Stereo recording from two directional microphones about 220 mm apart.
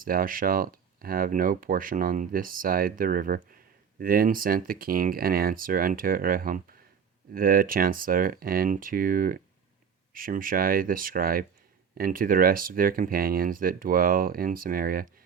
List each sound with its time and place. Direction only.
0.0 s speech: 40° right (ahead or behind)